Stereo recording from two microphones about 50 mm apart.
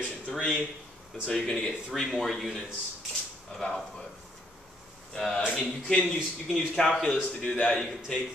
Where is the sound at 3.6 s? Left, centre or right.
Centre.